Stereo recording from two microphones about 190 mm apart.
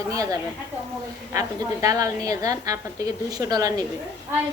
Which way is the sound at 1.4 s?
20° right (ahead or behind).